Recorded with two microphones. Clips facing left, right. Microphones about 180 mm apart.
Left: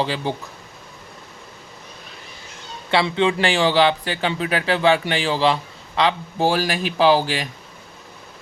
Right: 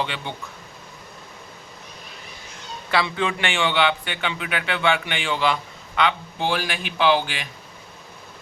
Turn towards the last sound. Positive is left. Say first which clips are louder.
# left 4 dB
turn(degrees=35)  # may be behind; listen again after turning